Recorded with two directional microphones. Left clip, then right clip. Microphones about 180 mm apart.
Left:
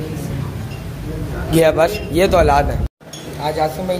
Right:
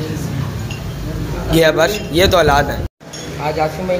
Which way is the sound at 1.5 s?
10° left (ahead or behind).